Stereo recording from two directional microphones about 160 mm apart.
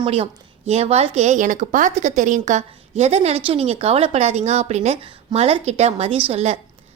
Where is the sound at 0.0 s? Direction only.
40° right (ahead or behind).